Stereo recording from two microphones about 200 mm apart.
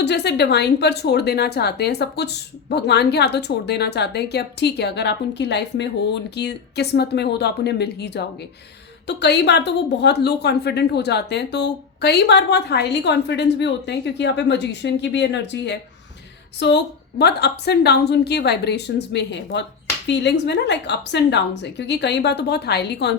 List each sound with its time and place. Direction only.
0.0 s a woman's voice: 60° left (ahead or behind)